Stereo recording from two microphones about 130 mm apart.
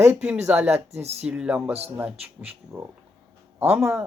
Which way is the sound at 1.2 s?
10° right (ahead or behind).